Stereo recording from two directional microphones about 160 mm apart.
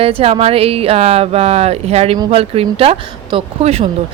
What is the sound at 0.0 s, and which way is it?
A woman's voice, 35° right (ahead or behind).